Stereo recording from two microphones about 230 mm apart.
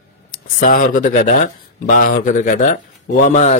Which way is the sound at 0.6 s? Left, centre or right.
Left.